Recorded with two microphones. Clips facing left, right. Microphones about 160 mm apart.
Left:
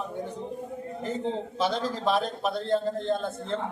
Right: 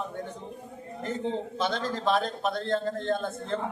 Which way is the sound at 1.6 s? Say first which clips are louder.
Left 3 dB; 5° left (ahead or behind).